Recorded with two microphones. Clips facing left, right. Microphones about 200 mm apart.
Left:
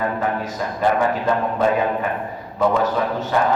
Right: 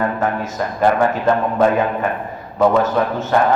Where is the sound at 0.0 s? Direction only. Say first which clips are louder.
Right 3 dB; 45° right (ahead or behind).